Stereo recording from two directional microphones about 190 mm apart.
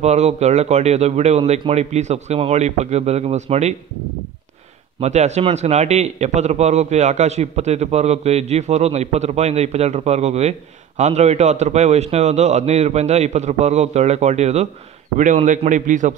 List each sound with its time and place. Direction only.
0.0 s a man's voice: 35° right (ahead or behind)
5.0 s a man's voice: 35° right (ahead or behind)